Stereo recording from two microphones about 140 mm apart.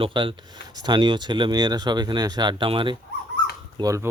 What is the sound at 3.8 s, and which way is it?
Speech, 25° right (ahead or behind).